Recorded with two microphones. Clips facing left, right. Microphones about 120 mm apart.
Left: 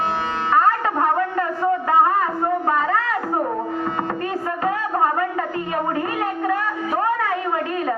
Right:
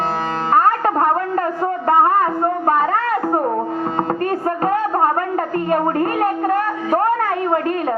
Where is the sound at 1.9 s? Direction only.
45° right (ahead or behind).